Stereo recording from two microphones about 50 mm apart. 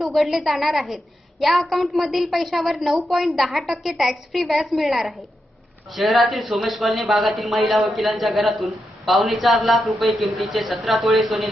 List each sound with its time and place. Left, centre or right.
0.0 s speech: centre